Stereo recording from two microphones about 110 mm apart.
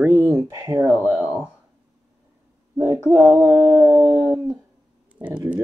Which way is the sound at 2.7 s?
25° right (ahead or behind).